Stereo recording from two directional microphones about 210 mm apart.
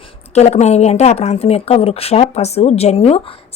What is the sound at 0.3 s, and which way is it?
A woman's voice, 30° left (ahead or behind).